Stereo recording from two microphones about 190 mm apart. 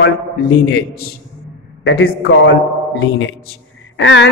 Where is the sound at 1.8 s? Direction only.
90° left.